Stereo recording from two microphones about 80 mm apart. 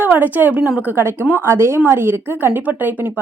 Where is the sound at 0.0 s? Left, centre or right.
Right.